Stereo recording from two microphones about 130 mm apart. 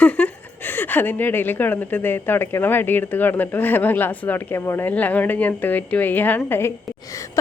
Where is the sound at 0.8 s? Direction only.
15° left (ahead or behind).